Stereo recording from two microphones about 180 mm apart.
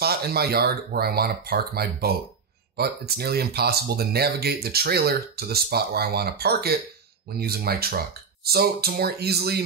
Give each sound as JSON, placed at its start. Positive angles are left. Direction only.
{"t": 0.0, "sound": "speech", "side_deg": -60}